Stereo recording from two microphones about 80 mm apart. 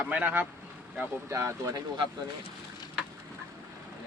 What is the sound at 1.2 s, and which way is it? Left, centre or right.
Speech, right.